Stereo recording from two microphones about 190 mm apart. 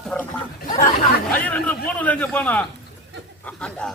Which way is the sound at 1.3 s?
10° left (ahead or behind).